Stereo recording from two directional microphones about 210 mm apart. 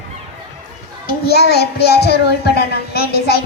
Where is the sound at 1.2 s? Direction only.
50° left (ahead or behind).